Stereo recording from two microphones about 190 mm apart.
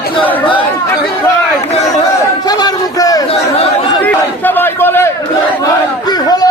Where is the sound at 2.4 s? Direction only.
20° left (ahead or behind).